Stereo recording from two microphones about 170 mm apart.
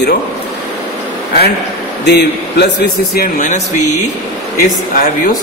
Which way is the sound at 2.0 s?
90° left.